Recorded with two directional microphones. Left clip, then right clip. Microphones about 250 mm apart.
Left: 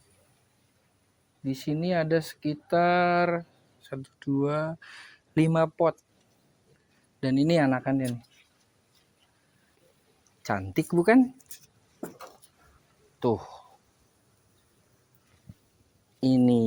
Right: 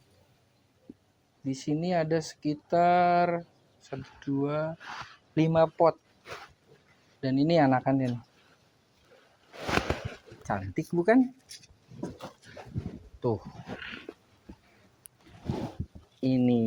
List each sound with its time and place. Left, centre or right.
1.5 s speech: left
7.2 s speech: left
10.4 s speech: left
13.1 s a sound: left
16.2 s speech: left